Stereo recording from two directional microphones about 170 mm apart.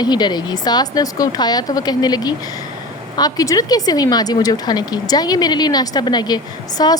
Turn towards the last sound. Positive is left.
turn(degrees=25)  # may be behind; listen again after turning